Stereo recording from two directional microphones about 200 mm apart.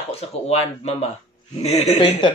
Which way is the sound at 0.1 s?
30° left (ahead or behind).